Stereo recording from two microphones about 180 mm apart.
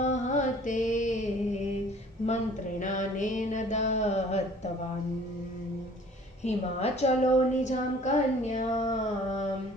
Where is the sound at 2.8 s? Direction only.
45° left (ahead or behind).